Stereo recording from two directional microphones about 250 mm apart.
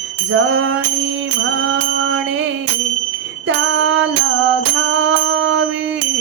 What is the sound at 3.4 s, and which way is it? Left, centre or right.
Music, right.